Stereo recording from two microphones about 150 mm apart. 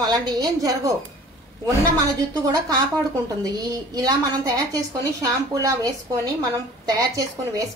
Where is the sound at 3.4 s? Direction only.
25° right (ahead or behind).